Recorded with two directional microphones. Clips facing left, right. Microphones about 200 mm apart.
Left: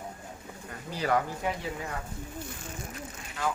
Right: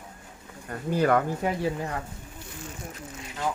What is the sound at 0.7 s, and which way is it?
Speech, 50° right (ahead or behind).